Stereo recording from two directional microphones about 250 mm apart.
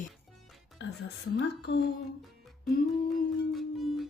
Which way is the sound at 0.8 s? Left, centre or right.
Left.